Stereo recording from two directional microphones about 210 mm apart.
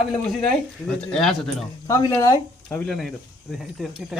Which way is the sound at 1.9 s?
15° left (ahead or behind).